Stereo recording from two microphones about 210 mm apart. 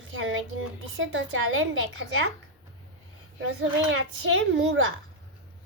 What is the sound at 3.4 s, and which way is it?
A woman's voice, 70° right (ahead or behind).